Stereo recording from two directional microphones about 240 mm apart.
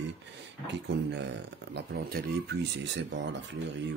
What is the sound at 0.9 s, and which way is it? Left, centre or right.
Speech, right.